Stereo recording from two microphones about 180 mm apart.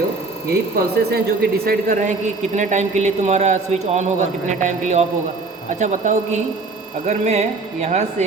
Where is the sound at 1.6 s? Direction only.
55° right (ahead or behind).